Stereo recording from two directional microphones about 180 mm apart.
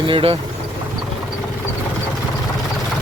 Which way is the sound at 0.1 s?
30° right (ahead or behind).